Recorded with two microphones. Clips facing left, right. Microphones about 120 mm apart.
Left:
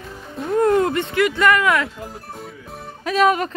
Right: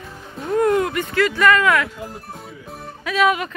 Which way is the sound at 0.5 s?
25° left (ahead or behind).